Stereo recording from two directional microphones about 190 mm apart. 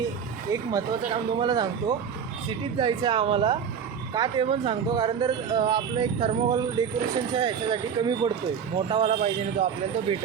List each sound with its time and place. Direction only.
0.5 s a man's voice: 20° right (ahead or behind)